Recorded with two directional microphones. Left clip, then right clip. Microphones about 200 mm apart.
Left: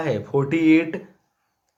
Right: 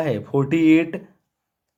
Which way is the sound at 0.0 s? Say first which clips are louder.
Right 1 dB; 30° right (ahead or behind).